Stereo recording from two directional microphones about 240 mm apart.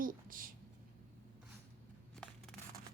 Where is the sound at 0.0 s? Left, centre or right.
Right.